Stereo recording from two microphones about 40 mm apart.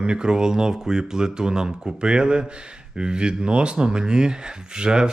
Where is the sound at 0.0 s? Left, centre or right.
Right.